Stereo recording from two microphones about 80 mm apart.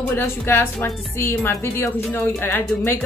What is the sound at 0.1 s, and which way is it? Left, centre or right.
A woman's voice, left.